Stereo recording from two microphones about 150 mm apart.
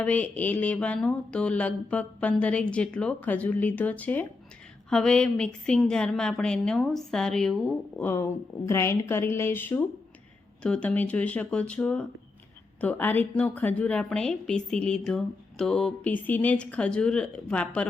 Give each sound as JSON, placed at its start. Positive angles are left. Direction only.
{"t": 0.0, "sound": "a woman's voice", "side_deg": 10}
{"t": 8.0, "sound": "a woman's voice", "side_deg": 15}